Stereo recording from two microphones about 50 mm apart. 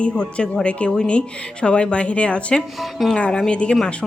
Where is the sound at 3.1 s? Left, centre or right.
Left.